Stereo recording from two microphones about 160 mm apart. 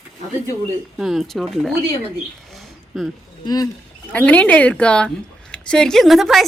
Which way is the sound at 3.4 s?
25° left (ahead or behind).